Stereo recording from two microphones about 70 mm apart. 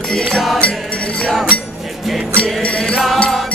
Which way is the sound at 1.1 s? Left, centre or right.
Centre.